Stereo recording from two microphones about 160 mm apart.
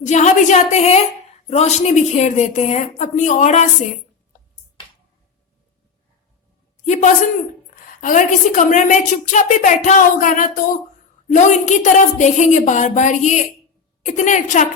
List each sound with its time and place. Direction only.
0.0 s a woman's voice: 45° left (ahead or behind)
6.8 s a man's voice: 50° left (ahead or behind)